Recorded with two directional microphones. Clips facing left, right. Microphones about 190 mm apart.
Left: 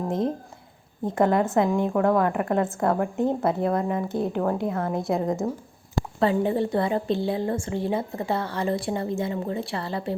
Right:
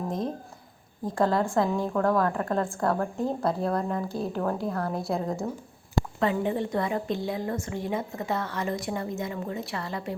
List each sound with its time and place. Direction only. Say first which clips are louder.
1.0 s a woman's voice: left 3 dB; 20° left (ahead or behind)
6.1 s a woman's voice: left 5 dB; 35° left (ahead or behind)